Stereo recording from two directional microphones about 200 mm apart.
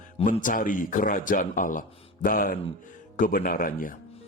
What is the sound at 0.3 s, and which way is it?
A man's voice, 40° left (ahead or behind).